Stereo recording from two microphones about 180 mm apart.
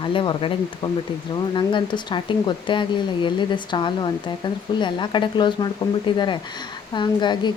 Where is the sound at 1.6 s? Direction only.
25° left (ahead or behind).